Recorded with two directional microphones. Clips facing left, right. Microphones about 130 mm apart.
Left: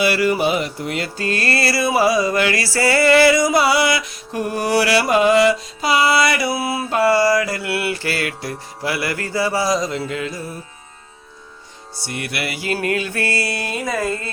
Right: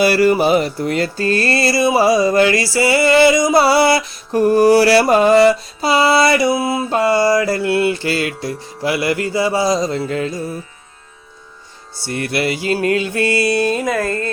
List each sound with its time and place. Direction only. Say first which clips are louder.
0.0 s music: right 4 dB; 40° right (ahead or behind); by 3.6 s 20° right (ahead or behind)
3.6 s music: right 4 dB; 35° right (ahead or behind)
10.1 s music: right 5 dB; 35° right (ahead or behind)
12.0 s music: right 7 dB; 30° right (ahead or behind)
13.9 s a sound: right 2 dB; 10° left (ahead or behind)